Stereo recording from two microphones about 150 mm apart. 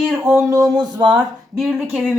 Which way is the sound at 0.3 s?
20° right (ahead or behind).